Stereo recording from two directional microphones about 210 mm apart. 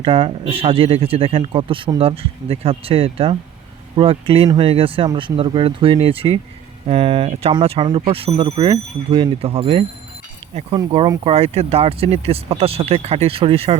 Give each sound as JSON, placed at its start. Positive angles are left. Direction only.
{"t": 0.0, "sound": "a man's voice", "side_deg": -25}
{"t": 10.8, "sound": "a man's voice", "side_deg": -20}